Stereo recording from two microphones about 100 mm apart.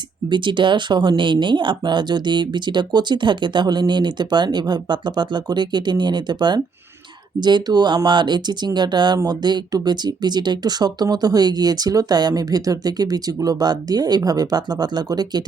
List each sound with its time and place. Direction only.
0.3 s speech: 55° right (ahead or behind)